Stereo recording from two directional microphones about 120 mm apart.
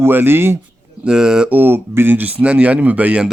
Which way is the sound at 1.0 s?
5° right (ahead or behind).